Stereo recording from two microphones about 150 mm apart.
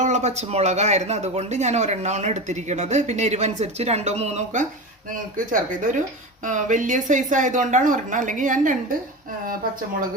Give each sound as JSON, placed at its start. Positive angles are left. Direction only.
{"t": 0.0, "sound": "speech", "side_deg": -50}
{"t": 5.1, "sound": "a woman's voice", "side_deg": -65}